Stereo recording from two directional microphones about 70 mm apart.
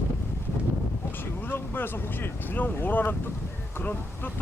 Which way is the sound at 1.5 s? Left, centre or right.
Left.